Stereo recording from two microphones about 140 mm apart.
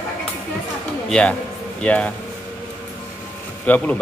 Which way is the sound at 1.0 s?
5° left (ahead or behind).